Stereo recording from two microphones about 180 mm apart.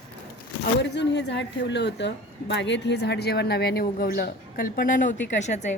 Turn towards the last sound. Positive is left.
turn(degrees=40)  # may be behind; listen again after turning